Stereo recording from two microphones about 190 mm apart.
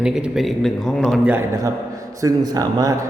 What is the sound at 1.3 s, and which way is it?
A man's voice, 15° right (ahead or behind).